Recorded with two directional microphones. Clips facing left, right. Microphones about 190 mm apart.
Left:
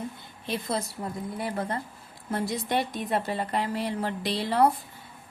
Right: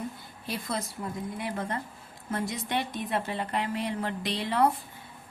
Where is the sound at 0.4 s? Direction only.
25° left (ahead or behind).